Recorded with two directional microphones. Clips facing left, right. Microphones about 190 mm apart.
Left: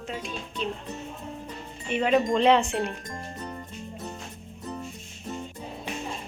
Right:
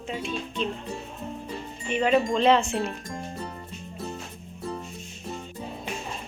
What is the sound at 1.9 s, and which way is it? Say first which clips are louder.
Speech: even; 5° left (ahead or behind).